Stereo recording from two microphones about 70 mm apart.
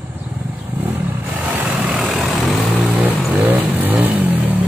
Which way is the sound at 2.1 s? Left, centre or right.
Centre.